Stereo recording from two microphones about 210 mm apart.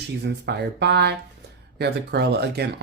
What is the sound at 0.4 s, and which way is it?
Speech, 55° right (ahead or behind).